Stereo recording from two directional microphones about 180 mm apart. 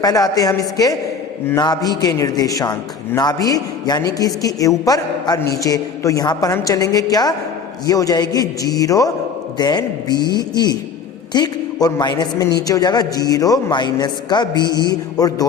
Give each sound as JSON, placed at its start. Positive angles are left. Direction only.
{"t": 0.0, "sound": "a man's voice", "side_deg": 20}
{"t": 11.3, "sound": "a man's voice", "side_deg": 20}